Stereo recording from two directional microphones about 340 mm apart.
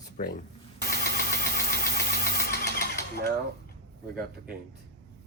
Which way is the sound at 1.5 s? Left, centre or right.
Left.